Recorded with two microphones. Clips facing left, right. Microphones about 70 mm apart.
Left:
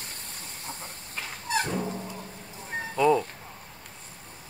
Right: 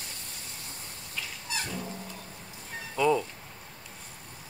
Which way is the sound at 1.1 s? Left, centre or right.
Left.